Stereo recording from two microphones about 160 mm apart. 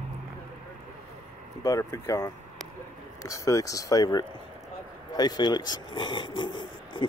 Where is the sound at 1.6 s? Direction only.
20° left (ahead or behind).